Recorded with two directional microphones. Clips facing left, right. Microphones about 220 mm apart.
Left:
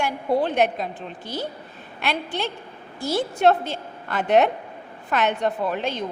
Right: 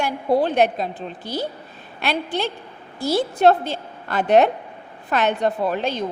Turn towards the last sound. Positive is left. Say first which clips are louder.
# right 3 dB
turn(degrees=-35)  # may be behind; listen again after turning